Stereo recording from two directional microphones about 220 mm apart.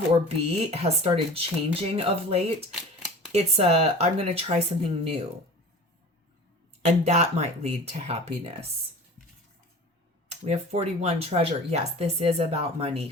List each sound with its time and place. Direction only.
0.7 s speech: 25° right (ahead or behind)
2.7 s typewriter: 5° right (ahead or behind)
3.3 s speech: 25° right (ahead or behind)
6.8 s speech: 30° right (ahead or behind)
10.2 s speech: 30° right (ahead or behind)